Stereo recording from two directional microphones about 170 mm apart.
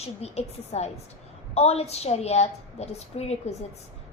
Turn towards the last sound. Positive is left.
turn(degrees=40)  # may be behind; listen again after turning